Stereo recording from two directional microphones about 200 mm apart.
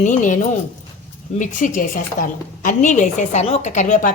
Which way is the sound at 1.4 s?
40° left (ahead or behind).